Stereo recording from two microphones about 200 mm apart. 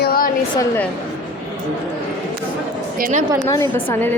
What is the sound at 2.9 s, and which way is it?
Speech, 45° right (ahead or behind).